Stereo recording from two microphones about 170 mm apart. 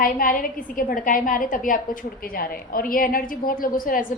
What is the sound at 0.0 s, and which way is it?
A woman's voice, 55° left (ahead or behind).